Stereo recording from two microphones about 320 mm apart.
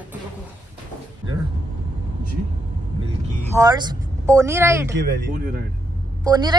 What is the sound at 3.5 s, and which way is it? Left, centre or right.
Speech, centre.